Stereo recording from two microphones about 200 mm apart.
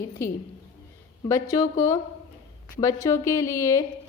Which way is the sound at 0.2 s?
15° left (ahead or behind).